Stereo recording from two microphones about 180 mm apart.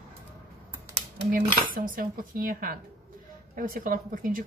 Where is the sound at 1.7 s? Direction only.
50° right (ahead or behind).